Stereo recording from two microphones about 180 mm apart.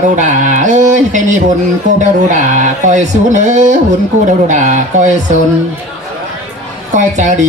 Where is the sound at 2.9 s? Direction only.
40° right (ahead or behind).